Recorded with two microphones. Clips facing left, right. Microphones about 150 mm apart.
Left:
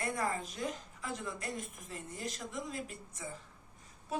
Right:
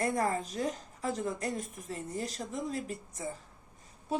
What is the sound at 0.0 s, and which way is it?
A woman's voice, 40° right (ahead or behind).